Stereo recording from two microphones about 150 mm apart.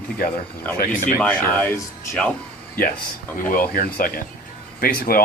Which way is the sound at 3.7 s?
80° left.